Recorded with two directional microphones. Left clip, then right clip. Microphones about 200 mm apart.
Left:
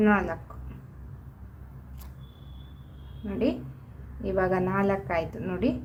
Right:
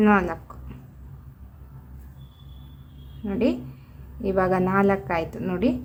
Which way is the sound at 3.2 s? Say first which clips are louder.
Right 4 dB; 25° right (ahead or behind).